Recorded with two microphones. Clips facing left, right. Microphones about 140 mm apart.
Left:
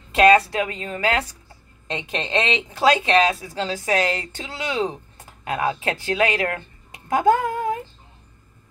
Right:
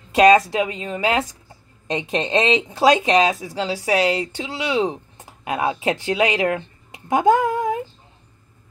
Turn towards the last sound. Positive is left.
turn(degrees=-15)  # may be behind; listen again after turning